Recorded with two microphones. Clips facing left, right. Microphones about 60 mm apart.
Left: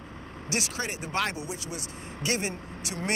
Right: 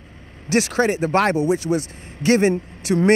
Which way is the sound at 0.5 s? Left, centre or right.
Right.